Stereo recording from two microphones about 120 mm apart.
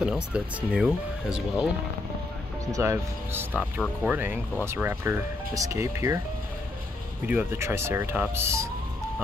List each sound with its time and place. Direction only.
0.0 s speech: 10° right (ahead or behind)
2.6 s speech: 25° right (ahead or behind)
7.2 s speech: 20° right (ahead or behind)